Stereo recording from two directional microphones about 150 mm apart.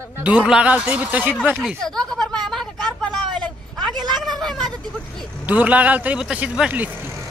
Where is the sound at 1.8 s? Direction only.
5° left (ahead or behind).